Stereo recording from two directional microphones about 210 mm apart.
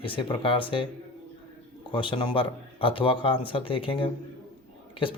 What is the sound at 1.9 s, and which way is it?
Speech, 25° left (ahead or behind).